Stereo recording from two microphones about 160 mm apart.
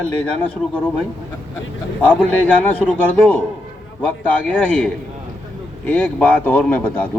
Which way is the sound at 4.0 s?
10° left (ahead or behind).